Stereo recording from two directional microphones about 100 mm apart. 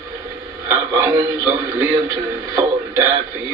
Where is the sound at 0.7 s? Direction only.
25° right (ahead or behind).